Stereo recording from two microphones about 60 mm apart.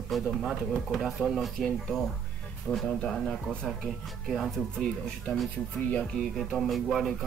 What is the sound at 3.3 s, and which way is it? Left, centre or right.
Speech, centre.